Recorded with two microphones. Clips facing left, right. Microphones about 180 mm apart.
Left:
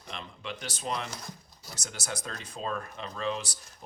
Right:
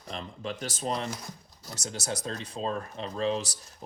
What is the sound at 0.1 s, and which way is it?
Speech, 40° right (ahead or behind).